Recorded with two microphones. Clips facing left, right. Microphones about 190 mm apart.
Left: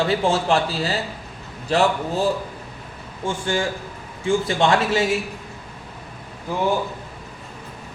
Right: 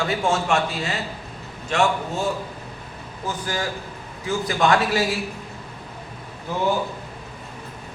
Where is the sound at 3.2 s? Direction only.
25° left (ahead or behind).